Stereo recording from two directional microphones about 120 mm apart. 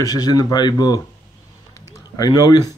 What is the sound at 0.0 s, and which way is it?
Speech, 30° left (ahead or behind).